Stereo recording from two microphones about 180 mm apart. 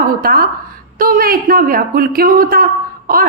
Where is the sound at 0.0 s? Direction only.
55° right (ahead or behind).